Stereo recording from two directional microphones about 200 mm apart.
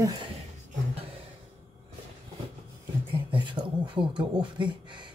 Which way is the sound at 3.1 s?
25° right (ahead or behind).